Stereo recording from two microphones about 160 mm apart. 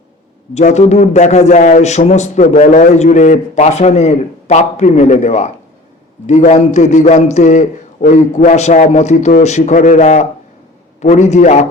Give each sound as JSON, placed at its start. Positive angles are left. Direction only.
{"t": 0.5, "sound": "a man's voice", "side_deg": 45}